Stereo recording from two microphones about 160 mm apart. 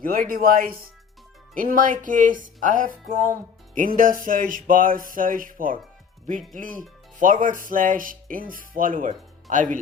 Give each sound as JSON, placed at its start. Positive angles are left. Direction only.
{"t": 0.0, "sound": "speech", "side_deg": -60}